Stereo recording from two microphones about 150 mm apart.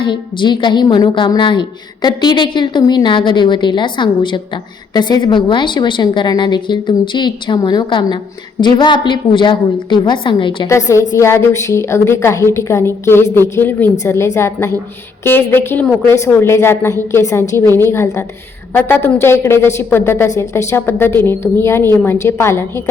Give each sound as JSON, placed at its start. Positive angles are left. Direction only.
{"t": 0.0, "sound": "a woman's voice", "side_deg": 30}
{"t": 10.7, "sound": "a woman's voice", "side_deg": 20}